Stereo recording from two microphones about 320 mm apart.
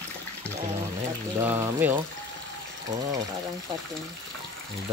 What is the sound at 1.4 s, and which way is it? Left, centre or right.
Speech, centre.